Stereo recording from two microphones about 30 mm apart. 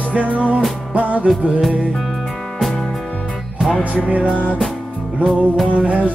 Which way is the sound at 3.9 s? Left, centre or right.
Right.